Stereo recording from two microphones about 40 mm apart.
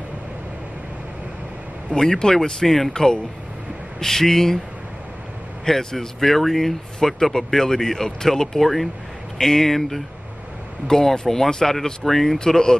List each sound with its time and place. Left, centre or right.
1.9 s speech: centre
5.7 s speech: centre
12.4 s speech: centre